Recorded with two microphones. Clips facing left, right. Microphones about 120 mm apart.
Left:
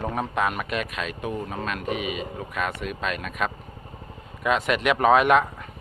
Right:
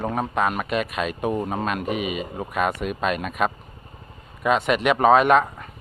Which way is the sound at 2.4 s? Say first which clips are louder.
Right 8 dB; 10° right (ahead or behind).